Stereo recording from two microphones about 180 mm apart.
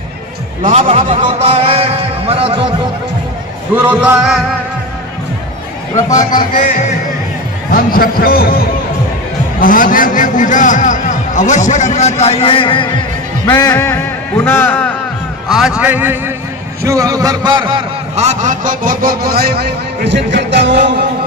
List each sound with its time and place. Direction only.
0.6 s a man's voice: 35° right (ahead or behind)
3.7 s a man's voice: 10° right (ahead or behind)
6.3 s a man's voice: 50° left (ahead or behind)
7.7 s a man's voice: 55° left (ahead or behind); by 12.8 s 30° left (ahead or behind)
13.5 s a man's voice: 20° left (ahead or behind)
15.5 s a man's voice: 5° right (ahead or behind); by 20.8 s 80° right